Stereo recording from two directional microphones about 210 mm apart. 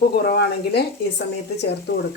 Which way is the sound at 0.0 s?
45° left (ahead or behind).